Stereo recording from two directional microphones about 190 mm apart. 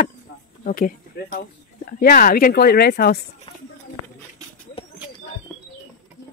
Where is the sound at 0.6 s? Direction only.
45° left (ahead or behind).